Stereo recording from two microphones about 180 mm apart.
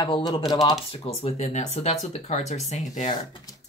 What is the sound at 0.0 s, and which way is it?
Speech, 25° left (ahead or behind).